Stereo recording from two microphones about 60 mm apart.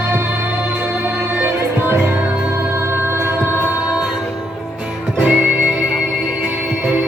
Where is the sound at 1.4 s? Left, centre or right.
Right.